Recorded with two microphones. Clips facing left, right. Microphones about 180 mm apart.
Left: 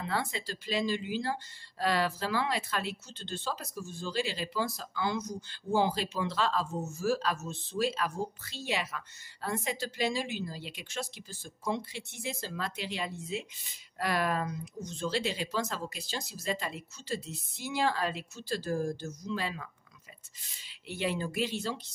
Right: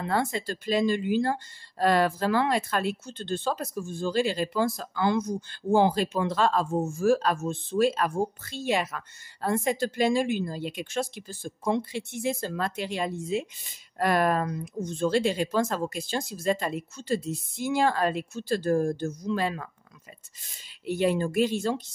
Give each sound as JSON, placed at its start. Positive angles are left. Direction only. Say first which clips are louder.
{"t": 0.0, "sound": "speech", "louder": "right 7 dB", "side_deg": -50}
{"t": 20.8, "sound": "speech", "louder": "right 8 dB", "side_deg": -45}